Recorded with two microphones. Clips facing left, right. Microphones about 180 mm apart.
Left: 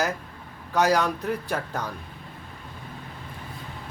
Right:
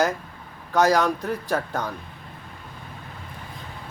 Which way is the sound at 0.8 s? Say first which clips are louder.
Right 3 dB; 35° right (ahead or behind).